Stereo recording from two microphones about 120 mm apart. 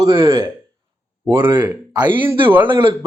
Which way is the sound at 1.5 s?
35° right (ahead or behind).